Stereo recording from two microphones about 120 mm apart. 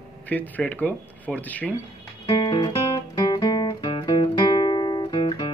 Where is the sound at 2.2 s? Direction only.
30° left (ahead or behind).